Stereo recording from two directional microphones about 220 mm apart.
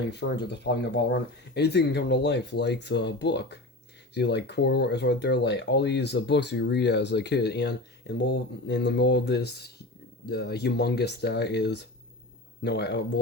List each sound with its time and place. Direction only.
0.1 s speech: 50° left (ahead or behind)